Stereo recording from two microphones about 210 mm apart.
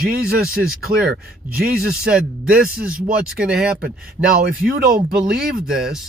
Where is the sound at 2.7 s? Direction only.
5° right (ahead or behind).